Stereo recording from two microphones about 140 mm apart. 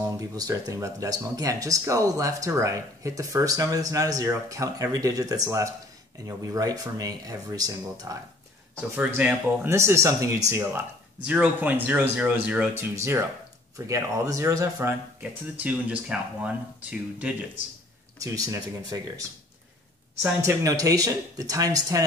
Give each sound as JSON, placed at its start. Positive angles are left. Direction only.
{"t": 0.4, "sound": "speech", "side_deg": -25}
{"t": 8.9, "sound": "speech", "side_deg": -10}
{"t": 11.2, "sound": "speech", "side_deg": -10}
{"t": 15.6, "sound": "speech", "side_deg": -10}
{"t": 18.2, "sound": "speech", "side_deg": -25}
{"t": 20.4, "sound": "speech", "side_deg": -25}